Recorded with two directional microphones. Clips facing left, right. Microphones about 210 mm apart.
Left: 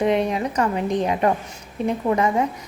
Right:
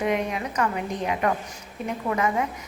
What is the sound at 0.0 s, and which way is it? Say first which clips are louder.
A woman's voice: left 5 dB; 35° left (ahead or behind).